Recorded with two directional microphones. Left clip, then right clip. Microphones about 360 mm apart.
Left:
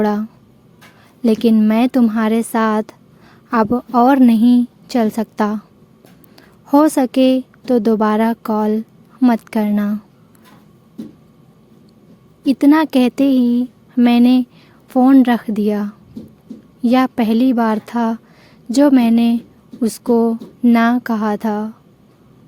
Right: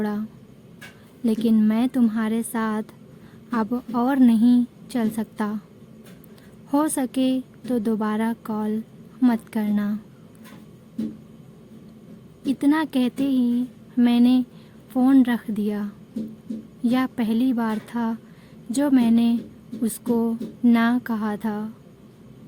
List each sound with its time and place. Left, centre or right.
0.0 s speech: left
6.7 s speech: left
12.5 s speech: left